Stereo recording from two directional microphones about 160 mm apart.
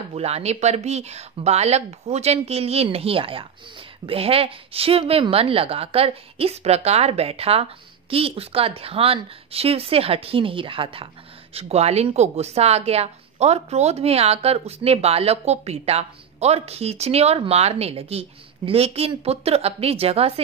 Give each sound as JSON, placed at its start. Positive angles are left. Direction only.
{"t": 0.1, "sound": "a woman's voice", "side_deg": -40}